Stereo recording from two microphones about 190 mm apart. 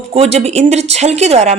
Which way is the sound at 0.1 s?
35° right (ahead or behind).